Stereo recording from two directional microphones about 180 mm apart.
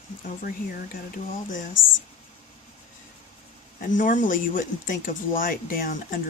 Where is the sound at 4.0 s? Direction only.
45° left (ahead or behind).